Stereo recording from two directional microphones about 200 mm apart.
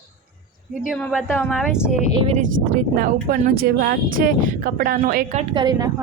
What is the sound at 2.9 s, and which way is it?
Speech, 45° right (ahead or behind).